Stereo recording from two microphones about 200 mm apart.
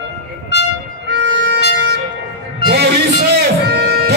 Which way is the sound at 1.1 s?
60° right (ahead or behind).